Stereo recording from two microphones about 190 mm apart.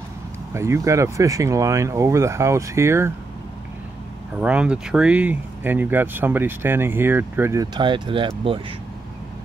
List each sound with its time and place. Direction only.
0.5 s speech: 15° right (ahead or behind)
4.4 s speech: 5° right (ahead or behind); by 8.3 s 25° right (ahead or behind)